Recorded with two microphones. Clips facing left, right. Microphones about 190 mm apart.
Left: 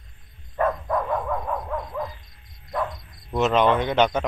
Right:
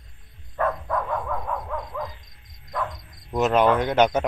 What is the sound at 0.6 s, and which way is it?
Dog, 20° left (ahead or behind).